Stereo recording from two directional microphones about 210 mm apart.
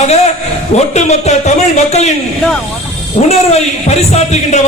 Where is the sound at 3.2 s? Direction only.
35° left (ahead or behind).